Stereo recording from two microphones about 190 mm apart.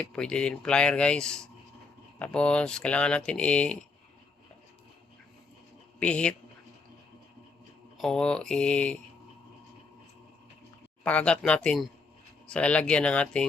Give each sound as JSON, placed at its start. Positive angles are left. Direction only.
{"t": 0.0, "sound": "speech", "side_deg": 5}
{"t": 6.0, "sound": "speech", "side_deg": 5}
{"t": 7.9, "sound": "speech", "side_deg": 0}
{"t": 11.0, "sound": "speech", "side_deg": 5}